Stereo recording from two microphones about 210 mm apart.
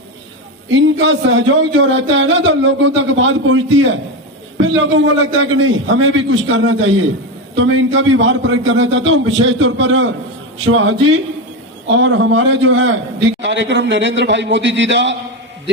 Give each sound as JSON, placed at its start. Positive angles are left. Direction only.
{"t": 0.7, "sound": "a man's voice", "side_deg": -60}